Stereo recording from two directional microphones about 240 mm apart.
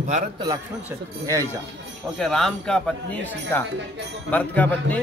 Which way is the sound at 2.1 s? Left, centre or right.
Centre.